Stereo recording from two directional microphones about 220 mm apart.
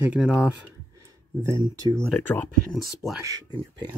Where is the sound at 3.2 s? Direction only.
15° right (ahead or behind).